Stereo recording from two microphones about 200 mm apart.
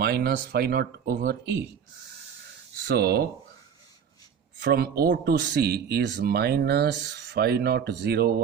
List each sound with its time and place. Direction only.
0.0 s a man's voice: 50° right (ahead or behind)
2.8 s a man's voice: 55° right (ahead or behind)
4.6 s a man's voice: 50° right (ahead or behind)